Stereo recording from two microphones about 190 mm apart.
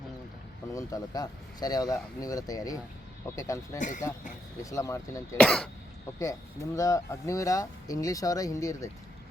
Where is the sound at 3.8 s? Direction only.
40° left (ahead or behind).